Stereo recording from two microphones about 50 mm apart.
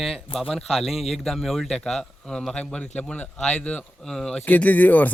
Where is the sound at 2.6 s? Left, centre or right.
Left.